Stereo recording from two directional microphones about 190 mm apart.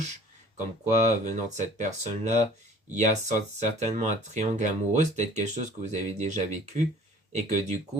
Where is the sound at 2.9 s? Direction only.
40° right (ahead or behind).